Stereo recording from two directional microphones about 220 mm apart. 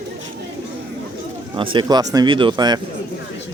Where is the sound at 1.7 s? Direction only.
20° right (ahead or behind).